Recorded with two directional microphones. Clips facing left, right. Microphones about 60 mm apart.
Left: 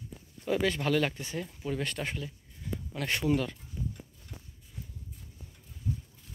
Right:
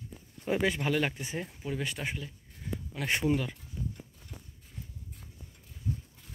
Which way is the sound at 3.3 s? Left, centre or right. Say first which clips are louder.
Left 2 dB; centre.